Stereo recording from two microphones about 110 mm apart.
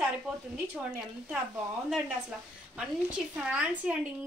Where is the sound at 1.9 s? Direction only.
5° right (ahead or behind).